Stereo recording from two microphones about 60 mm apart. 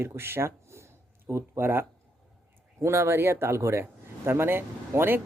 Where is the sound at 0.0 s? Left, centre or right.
Right.